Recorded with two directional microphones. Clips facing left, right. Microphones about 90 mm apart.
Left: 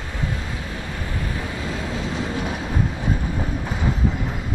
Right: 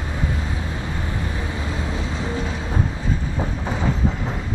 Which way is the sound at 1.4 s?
25° right (ahead or behind).